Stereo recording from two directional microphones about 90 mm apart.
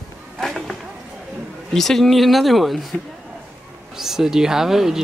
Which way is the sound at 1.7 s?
5° left (ahead or behind).